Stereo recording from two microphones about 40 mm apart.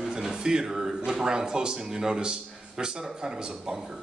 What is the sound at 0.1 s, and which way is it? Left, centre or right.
A man's voice, centre.